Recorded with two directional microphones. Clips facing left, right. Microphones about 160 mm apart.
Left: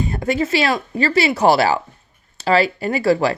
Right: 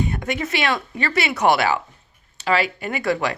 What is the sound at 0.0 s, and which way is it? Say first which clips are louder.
Speech: left 4 dB; 35° left (ahead or behind).